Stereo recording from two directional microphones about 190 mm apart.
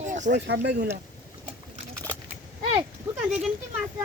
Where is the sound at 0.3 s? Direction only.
65° right (ahead or behind).